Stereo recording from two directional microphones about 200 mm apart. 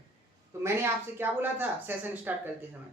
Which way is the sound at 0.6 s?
10° right (ahead or behind).